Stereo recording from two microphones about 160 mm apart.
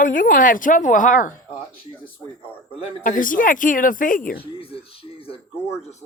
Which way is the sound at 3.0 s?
55° left (ahead or behind).